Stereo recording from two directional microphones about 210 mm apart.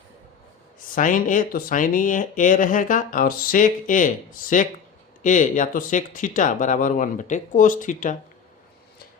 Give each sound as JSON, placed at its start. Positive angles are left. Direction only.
{"t": 0.9, "sound": "speech", "side_deg": 40}